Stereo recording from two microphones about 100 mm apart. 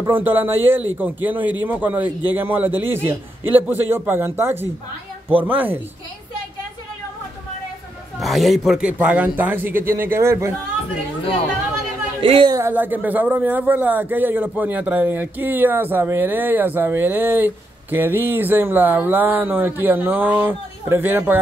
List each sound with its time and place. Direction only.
0.1 s a man's voice: 20° right (ahead or behind)
8.2 s a man's voice: centre (ahead or behind)
8.9 s a man's voice: 15° right (ahead or behind)
12.2 s a woman's voice: 60° right (ahead or behind)
12.6 s a man's voice: 20° right (ahead or behind)